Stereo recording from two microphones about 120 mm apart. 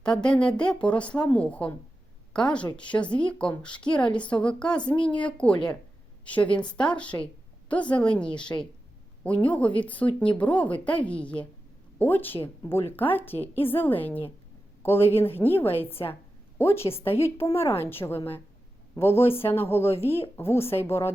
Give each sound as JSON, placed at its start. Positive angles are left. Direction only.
{"t": 0.0, "sound": "a woman's voice", "side_deg": 5}